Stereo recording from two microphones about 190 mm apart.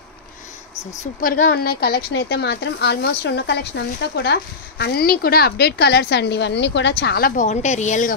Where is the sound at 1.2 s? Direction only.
50° left (ahead or behind).